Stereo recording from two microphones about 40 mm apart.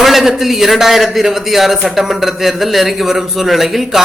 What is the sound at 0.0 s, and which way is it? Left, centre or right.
A man's voice, centre.